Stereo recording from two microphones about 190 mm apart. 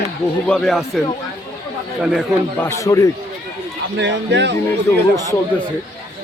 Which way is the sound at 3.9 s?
70° right (ahead or behind).